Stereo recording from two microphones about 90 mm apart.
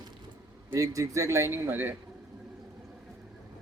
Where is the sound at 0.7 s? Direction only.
40° right (ahead or behind); by 1.9 s 25° right (ahead or behind).